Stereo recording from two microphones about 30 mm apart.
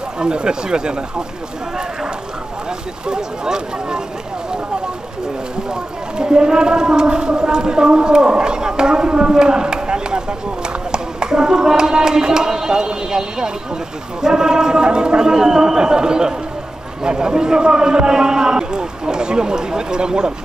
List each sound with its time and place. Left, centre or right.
0.2 s a man's voice: right
3.1 s a man's voice: right
5.7 s a man's voice: right